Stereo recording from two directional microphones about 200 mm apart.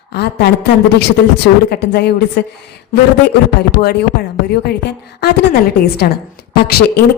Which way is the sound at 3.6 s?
50° left (ahead or behind).